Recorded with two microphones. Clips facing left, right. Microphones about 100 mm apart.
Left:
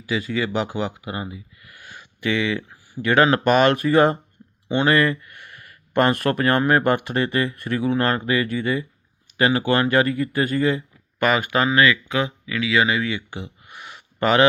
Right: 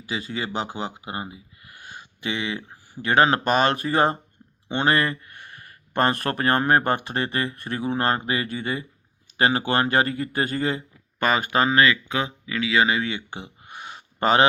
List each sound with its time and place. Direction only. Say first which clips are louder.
0.0 s speech: left 5 dB; 20° right (ahead or behind)
2.6 s a sound: left 5 dB; 40° right (ahead or behind)
3.0 s speech: left 2 dB; 25° right (ahead or behind)